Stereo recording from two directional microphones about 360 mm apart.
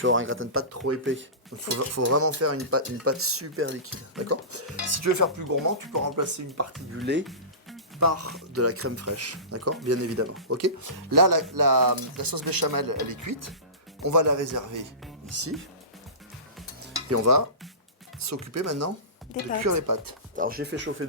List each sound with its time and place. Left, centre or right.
0.0 s speech: right
7.0 s speech: right
7.9 s speech: right
10.9 s speech: right
15.3 s speech: right
17.1 s speech: right
19.6 s speech: right
20.3 s speech: right